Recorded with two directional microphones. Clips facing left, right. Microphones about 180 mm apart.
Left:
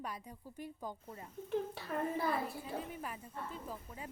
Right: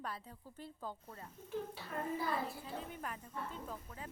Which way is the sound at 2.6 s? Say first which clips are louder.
Left 2 dB; 5° left (ahead or behind).